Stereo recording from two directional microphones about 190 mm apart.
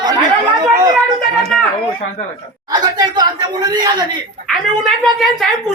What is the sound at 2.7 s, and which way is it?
Speech, 20° right (ahead or behind).